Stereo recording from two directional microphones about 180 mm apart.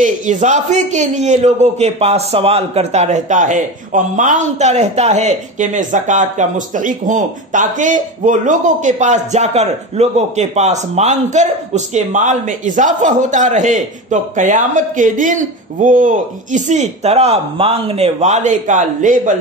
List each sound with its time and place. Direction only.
0.0 s a man's voice: 40° right (ahead or behind)